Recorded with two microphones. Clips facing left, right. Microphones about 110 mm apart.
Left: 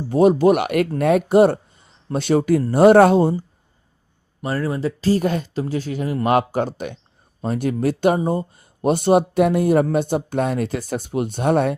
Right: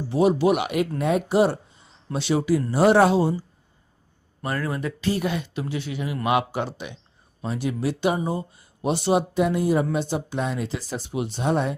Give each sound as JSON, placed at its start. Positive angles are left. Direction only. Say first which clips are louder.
{"t": 0.1, "sound": "speech", "louder": "left 5 dB", "side_deg": 45}
{"t": 4.4, "sound": "speech", "louder": "left 5 dB", "side_deg": 30}